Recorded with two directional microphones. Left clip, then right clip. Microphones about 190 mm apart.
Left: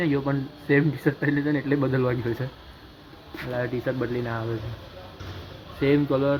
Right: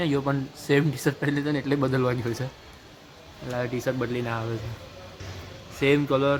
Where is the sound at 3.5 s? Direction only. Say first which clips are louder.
Even; 15° right (ahead or behind).